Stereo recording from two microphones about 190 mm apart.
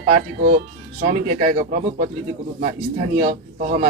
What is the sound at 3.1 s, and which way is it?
Speech, 40° right (ahead or behind).